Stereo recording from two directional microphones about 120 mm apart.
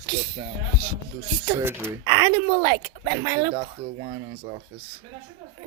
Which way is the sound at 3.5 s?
55° right (ahead or behind).